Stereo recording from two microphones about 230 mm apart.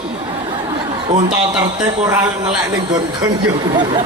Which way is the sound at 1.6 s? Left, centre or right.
Centre.